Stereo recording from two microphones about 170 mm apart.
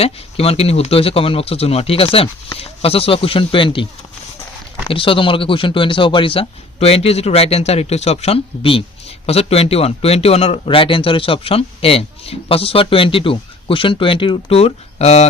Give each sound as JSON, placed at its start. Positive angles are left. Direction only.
{"t": 0.0, "sound": "a man's voice", "side_deg": 35}
{"t": 4.9, "sound": "a man's voice", "side_deg": 30}